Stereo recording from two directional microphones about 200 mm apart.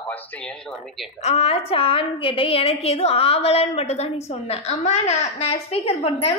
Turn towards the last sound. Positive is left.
turn(degrees=30)  # may be behind; listen again after turning